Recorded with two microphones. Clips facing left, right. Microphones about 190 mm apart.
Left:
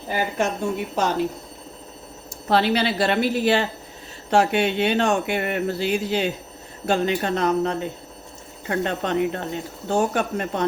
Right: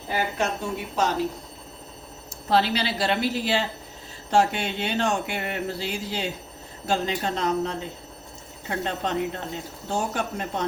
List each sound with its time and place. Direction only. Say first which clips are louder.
0.3 s a woman's voice: left 4 dB; 50° left (ahead or behind)
2.5 s speech: left 3 dB; 60° left (ahead or behind)